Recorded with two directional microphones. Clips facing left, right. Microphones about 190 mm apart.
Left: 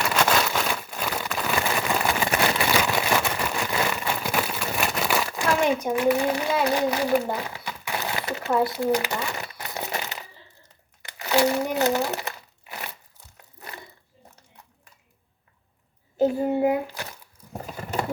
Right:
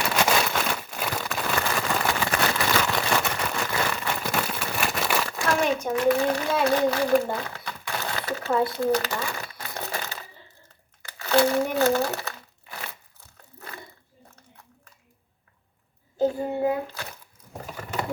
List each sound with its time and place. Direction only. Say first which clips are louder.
0.3 s crumpling: left 1 dB; centre (ahead or behind)
1.5 s a sound: left 2 dB; 15° left (ahead or behind)
4.2 s crumpling: left 1 dB; centre (ahead or behind)
8.5 s crumpling: left 1 dB; 5° left (ahead or behind)
13.3 s crumpling: even; 15° left (ahead or behind)
16.1 s child singing: left 3 dB; 20° left (ahead or behind)